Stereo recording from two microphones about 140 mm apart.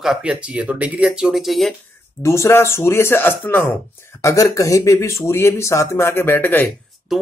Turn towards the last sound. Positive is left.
turn(degrees=0)  # may be behind; listen again after turning